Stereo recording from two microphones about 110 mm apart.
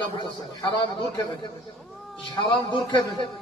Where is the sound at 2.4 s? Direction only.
50° left (ahead or behind).